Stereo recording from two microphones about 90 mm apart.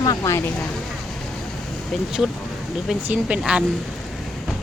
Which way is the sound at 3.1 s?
10° right (ahead or behind).